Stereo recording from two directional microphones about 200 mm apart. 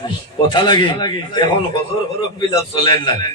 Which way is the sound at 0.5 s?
20° left (ahead or behind).